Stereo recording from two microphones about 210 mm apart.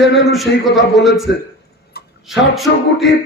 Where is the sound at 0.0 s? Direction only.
Centre (ahead or behind).